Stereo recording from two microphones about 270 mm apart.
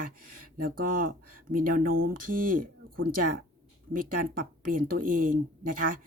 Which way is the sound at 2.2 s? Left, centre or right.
Right.